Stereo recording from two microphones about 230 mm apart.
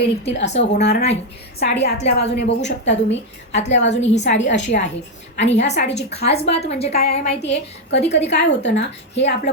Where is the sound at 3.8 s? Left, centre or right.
Left.